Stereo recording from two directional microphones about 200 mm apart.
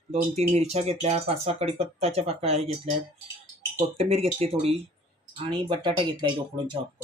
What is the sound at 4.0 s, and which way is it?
Speech, 30° right (ahead or behind).